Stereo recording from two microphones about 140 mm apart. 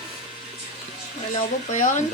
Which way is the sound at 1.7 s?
60° left (ahead or behind).